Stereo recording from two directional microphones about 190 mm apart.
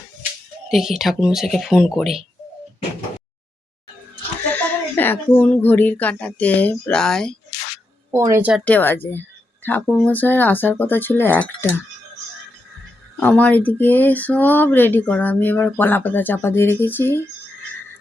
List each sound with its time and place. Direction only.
0.7 s speech: centre (ahead or behind)
4.5 s speech: 10° left (ahead or behind)
8.1 s speech: 15° right (ahead or behind)
8.6 s speech: 10° left (ahead or behind)
13.1 s speech: 5° left (ahead or behind)